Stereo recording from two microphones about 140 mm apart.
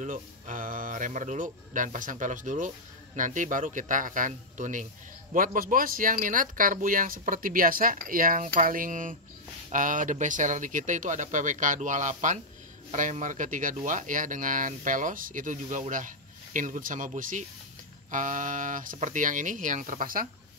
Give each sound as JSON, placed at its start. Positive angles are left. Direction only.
{"t": 0.0, "sound": "speech", "side_deg": -70}
{"t": 5.3, "sound": "speech", "side_deg": -80}